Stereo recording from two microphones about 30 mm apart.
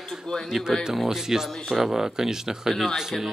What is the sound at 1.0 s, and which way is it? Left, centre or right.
Speech, centre.